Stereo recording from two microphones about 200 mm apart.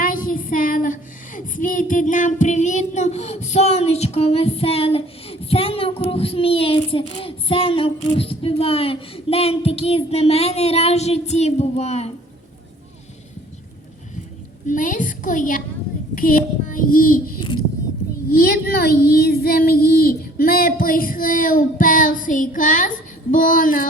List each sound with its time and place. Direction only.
0.0 s a sound: 45° left (ahead or behind); by 7.0 s 25° left (ahead or behind)
7.2 s child singing: 30° left (ahead or behind)
14.7 s a woman's voice: 40° left (ahead or behind)
18.3 s child singing: 50° left (ahead or behind)